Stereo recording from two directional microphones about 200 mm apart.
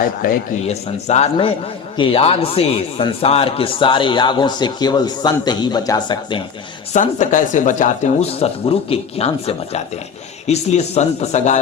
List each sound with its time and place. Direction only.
0.7 s speech: 35° left (ahead or behind)
6.9 s speech: 40° left (ahead or behind)